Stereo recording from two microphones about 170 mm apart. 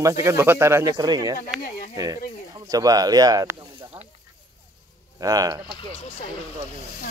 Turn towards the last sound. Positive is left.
turn(degrees=30)  # may be behind; listen again after turning